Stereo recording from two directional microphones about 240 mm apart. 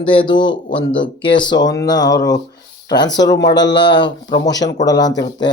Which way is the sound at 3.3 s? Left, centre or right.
Left.